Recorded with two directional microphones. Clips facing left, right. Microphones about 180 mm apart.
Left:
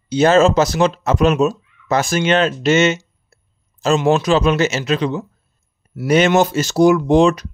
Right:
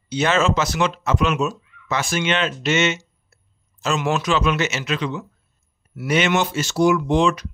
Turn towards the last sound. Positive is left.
turn(degrees=40)  # may be behind; listen again after turning